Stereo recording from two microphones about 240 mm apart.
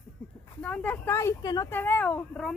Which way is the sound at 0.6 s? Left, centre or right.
Centre.